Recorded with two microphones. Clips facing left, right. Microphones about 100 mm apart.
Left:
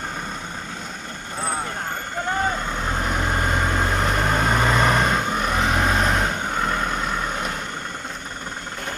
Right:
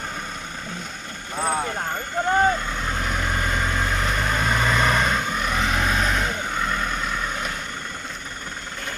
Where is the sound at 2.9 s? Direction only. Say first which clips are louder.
Left 3 dB; 25° left (ahead or behind).